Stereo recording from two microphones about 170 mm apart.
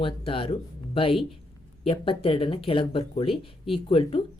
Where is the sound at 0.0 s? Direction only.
35° left (ahead or behind).